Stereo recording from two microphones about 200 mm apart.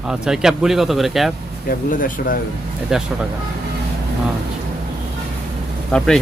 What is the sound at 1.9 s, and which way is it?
Speech, 45° left (ahead or behind).